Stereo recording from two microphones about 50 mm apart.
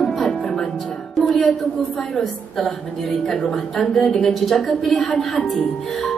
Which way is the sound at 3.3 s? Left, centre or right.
Centre.